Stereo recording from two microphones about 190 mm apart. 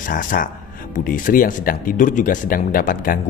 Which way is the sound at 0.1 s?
45° left (ahead or behind).